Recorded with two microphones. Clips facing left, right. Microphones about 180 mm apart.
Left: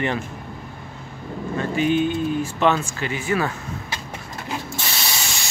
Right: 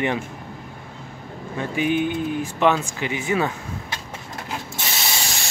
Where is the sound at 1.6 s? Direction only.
15° right (ahead or behind).